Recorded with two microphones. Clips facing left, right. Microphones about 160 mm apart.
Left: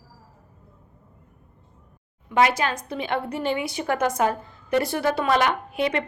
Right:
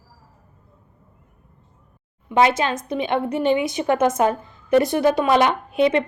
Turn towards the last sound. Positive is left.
turn(degrees=-20)  # may be behind; listen again after turning